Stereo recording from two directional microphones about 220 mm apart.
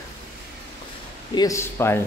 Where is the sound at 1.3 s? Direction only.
15° left (ahead or behind).